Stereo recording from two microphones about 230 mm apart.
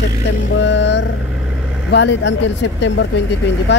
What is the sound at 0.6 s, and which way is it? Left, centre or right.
Speech, left.